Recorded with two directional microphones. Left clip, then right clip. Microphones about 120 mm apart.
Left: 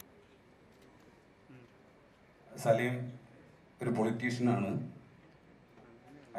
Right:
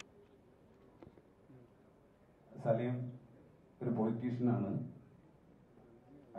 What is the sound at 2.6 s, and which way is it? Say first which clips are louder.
A man's voice: left 6 dB; 30° left (ahead or behind).